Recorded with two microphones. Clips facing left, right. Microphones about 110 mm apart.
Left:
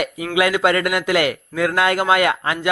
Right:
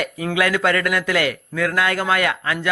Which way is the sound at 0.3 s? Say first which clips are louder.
Left 3 dB; 20° left (ahead or behind).